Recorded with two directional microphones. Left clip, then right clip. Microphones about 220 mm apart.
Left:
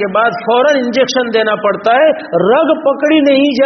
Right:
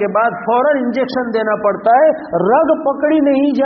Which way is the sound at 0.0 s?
35° left (ahead or behind).